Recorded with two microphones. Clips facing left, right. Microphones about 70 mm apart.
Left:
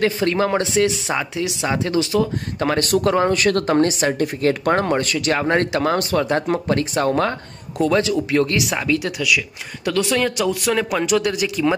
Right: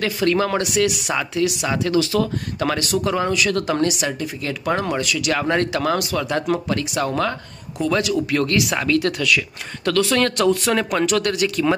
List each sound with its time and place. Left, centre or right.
0.0 s speech: left
2.8 s speech: left
4.2 s speech: left; by 11.7 s centre